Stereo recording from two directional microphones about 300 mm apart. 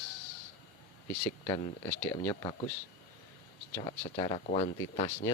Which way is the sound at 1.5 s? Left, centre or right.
Centre.